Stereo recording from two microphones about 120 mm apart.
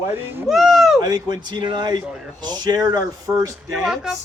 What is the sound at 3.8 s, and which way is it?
Snicker, 5° right (ahead or behind).